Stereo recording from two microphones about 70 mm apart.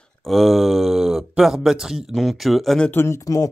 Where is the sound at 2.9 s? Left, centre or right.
Left.